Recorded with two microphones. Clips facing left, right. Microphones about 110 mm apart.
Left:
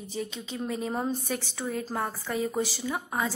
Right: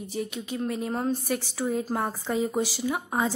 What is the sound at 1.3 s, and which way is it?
A woman's voice, 10° right (ahead or behind).